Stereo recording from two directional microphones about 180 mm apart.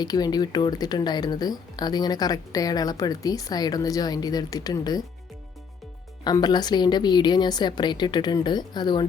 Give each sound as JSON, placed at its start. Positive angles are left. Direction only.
{"t": 0.0, "sound": "speech", "side_deg": 20}
{"t": 6.2, "sound": "speech", "side_deg": 25}